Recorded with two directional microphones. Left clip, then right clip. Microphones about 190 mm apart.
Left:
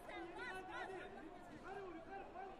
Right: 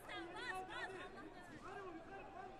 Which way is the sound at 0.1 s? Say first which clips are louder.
Right 2 dB; 30° right (ahead or behind).